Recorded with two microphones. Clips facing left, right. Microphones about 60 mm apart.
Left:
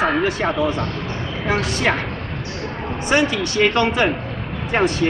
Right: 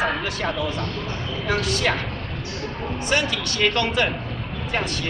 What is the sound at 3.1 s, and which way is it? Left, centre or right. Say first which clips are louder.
Speech: left 6 dB; left.